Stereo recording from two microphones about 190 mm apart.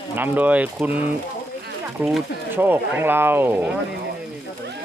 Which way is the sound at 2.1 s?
10° right (ahead or behind).